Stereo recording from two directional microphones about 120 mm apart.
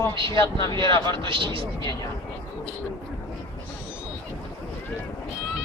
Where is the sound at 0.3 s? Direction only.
30° left (ahead or behind).